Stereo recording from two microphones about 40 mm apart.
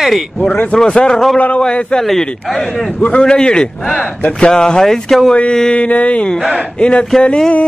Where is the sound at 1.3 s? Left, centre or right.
Left.